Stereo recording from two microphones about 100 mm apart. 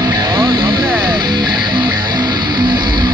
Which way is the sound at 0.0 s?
45° right (ahead or behind).